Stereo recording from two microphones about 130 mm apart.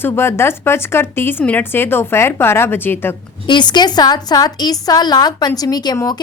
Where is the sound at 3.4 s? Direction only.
35° left (ahead or behind).